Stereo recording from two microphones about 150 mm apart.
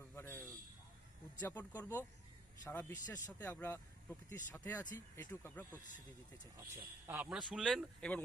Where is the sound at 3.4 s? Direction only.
15° left (ahead or behind).